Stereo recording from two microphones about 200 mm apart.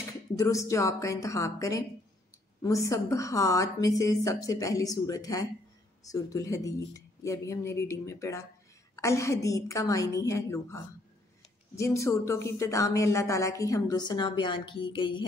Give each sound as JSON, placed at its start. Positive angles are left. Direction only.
{"t": 0.4, "sound": "a woman's voice", "side_deg": 15}